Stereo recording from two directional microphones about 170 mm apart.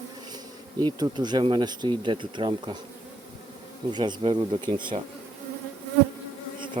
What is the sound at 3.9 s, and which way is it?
Bee, 25° right (ahead or behind).